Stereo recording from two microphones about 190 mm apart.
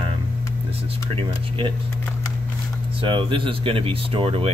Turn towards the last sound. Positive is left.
turn(degrees=-30)  # may be behind; listen again after turning